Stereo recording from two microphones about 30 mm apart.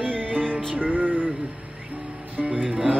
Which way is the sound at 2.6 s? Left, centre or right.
Right.